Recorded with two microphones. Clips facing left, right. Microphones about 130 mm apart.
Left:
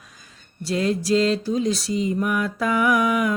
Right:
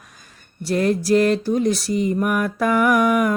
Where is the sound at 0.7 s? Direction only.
55° right (ahead or behind).